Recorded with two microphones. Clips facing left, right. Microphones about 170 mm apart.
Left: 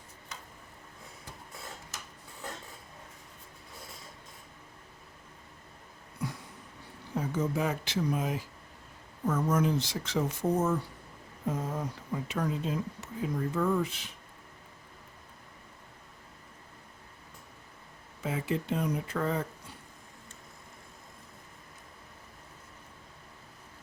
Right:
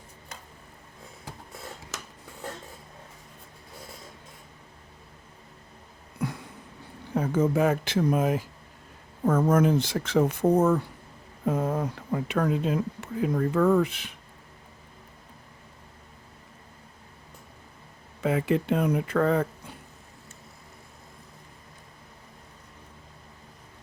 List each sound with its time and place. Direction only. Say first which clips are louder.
1.9 s a sound: right 6 dB; 90° right
7.1 s speech: right 7 dB; 55° right (ahead or behind)
18.2 s speech: right 8 dB; 65° right (ahead or behind)